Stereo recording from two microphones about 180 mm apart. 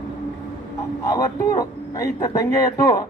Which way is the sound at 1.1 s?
20° left (ahead or behind).